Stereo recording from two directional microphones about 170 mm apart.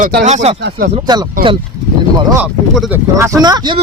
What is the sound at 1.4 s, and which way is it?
Speech, 50° right (ahead or behind).